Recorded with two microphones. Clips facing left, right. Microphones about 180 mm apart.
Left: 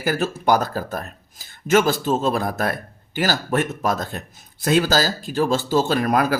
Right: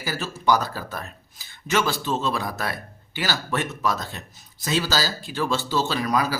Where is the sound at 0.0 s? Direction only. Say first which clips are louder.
Left 4 dB; 55° left (ahead or behind).